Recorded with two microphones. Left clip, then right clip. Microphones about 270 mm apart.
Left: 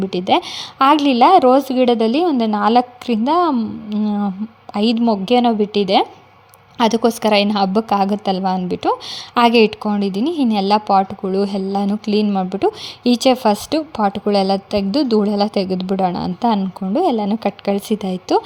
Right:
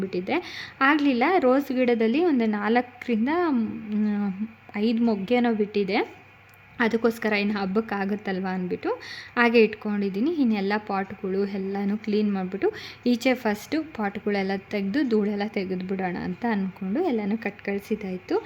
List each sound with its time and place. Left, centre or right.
0.0 s a woman's voice: left
4.0 s speech: centre
4.7 s a woman's voice: centre